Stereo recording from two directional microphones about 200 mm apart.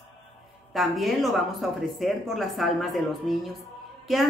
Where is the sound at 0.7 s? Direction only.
Centre (ahead or behind).